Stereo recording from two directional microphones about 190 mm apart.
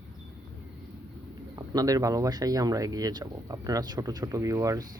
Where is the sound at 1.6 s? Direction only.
20° right (ahead or behind).